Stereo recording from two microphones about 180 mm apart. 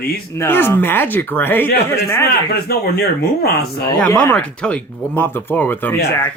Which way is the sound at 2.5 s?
60° left (ahead or behind).